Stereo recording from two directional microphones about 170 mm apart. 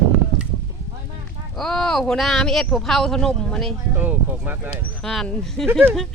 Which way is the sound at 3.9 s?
10° right (ahead or behind).